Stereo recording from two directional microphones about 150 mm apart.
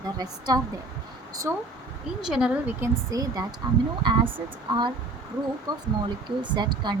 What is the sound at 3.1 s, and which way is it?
Speech, 25° right (ahead or behind).